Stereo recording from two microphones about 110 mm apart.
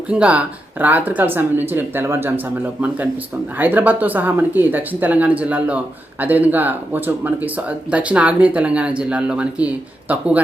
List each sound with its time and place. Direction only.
0.1 s speech: 10° right (ahead or behind)
3.6 s speech: 15° right (ahead or behind)